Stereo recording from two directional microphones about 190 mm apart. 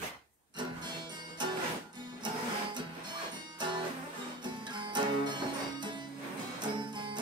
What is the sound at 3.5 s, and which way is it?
Music, 25° right (ahead or behind).